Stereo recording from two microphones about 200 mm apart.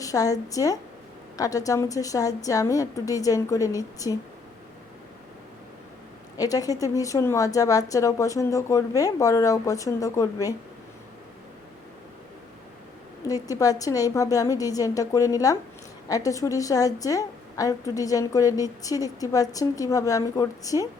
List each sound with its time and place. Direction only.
0.0 s a woman's voice: 15° left (ahead or behind)
6.3 s a woman's voice: 20° left (ahead or behind)
13.2 s a woman's voice: 15° left (ahead or behind)